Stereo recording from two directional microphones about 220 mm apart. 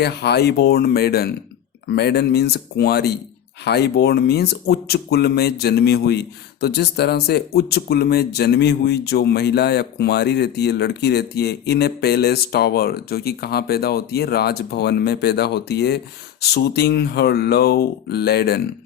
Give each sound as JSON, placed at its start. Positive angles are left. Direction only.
{"t": 0.0, "sound": "speech", "side_deg": 50}